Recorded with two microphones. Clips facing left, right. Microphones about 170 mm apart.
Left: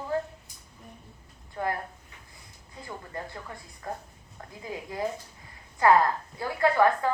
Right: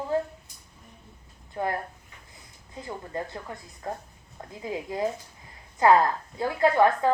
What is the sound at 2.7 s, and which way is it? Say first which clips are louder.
Speech: right 5 dB; 20° right (ahead or behind).